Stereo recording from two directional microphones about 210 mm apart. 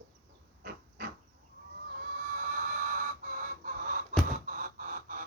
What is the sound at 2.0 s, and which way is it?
Chicken, 40° right (ahead or behind).